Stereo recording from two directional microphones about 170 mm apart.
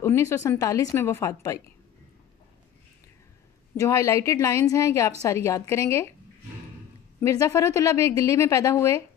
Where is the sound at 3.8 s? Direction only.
20° left (ahead or behind).